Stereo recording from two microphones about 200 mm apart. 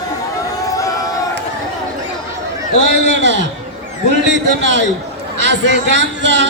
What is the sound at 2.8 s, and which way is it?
A man's voice, 60° right (ahead or behind).